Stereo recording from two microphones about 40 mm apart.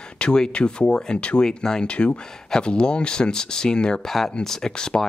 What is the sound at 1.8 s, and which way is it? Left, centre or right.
Speech, left.